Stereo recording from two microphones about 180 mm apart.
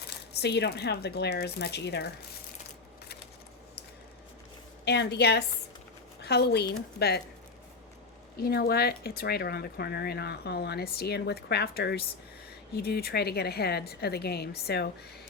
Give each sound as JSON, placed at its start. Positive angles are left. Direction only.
{"t": 0.4, "sound": "speech", "side_deg": 70}
{"t": 4.9, "sound": "speech", "side_deg": 65}
{"t": 8.4, "sound": "speech", "side_deg": 60}